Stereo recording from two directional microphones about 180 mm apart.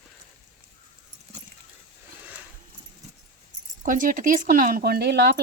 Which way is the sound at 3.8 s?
50° right (ahead or behind).